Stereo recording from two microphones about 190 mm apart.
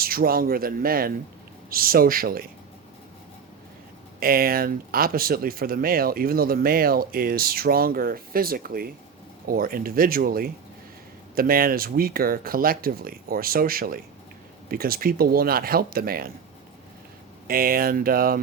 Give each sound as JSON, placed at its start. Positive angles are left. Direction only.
{"t": 0.0, "sound": "speech", "side_deg": -50}
{"t": 4.2, "sound": "speech", "side_deg": -50}
{"t": 17.5, "sound": "speech", "side_deg": -50}